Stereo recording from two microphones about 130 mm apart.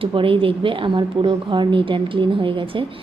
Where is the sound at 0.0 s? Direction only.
45° right (ahead or behind).